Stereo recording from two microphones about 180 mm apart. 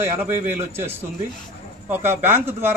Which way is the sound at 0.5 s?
10° right (ahead or behind).